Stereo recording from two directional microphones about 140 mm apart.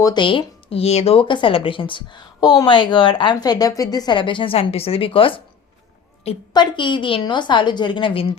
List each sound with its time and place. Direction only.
0.0 s speech: 35° left (ahead or behind)
6.5 s speech: 35° left (ahead or behind)